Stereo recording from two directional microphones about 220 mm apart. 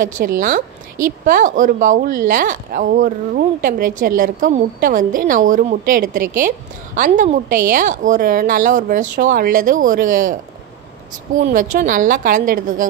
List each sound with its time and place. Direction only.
0.0 s a woman's voice: 40° right (ahead or behind)
11.5 s a woman's voice: 35° right (ahead or behind)